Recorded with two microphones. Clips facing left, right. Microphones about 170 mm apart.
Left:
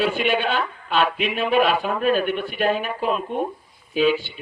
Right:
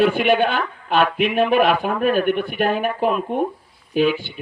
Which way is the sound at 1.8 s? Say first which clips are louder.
Right 2 dB; 55° right (ahead or behind).